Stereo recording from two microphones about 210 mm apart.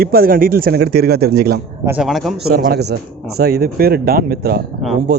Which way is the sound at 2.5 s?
50° right (ahead or behind).